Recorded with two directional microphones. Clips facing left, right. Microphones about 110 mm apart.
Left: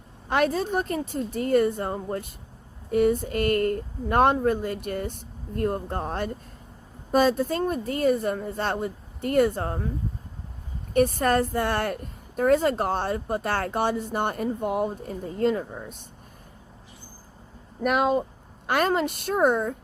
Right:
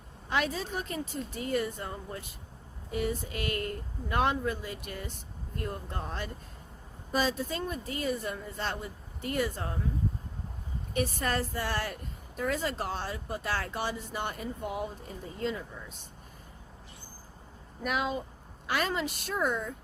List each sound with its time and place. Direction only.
0.3 s speech: 50° left (ahead or behind)
10.9 s speech: 50° left (ahead or behind)
17.8 s a woman's voice: 50° left (ahead or behind)